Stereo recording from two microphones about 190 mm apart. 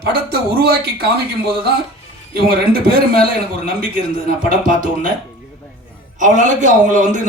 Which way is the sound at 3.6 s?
45° right (ahead or behind).